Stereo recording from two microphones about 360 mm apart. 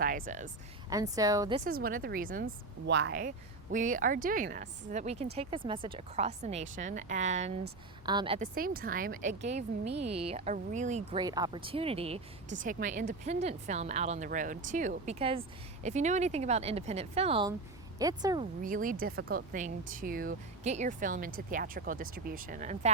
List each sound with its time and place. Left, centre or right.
0.0 s a woman's voice: right
0.9 s a woman's voice: centre
18.6 s a woman's voice: right